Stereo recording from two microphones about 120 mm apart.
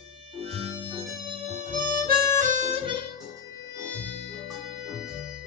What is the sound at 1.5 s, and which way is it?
Harmonica, 90° right.